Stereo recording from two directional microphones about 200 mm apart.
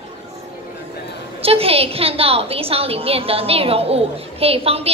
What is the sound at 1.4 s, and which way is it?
A woman's voice, 30° right (ahead or behind).